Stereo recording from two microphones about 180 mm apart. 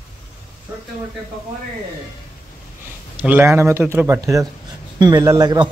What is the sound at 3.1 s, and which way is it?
A man's voice, 10° right (ahead or behind).